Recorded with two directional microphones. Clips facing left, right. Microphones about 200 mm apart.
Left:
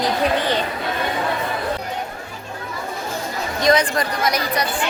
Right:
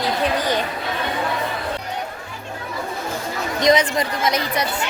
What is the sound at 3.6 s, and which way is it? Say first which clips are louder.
Speech: even; 20° right (ahead or behind).